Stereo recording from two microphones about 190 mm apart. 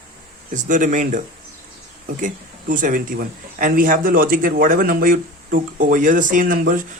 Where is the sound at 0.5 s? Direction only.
40° right (ahead or behind).